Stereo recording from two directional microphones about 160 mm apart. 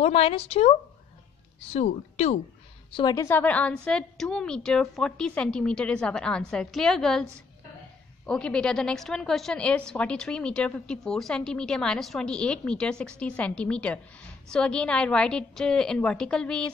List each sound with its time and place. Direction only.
0.0 s speech: 35° left (ahead or behind)
2.9 s a woman's voice: 25° left (ahead or behind); by 7.2 s 5° left (ahead or behind)
8.3 s a woman's voice: 5° left (ahead or behind)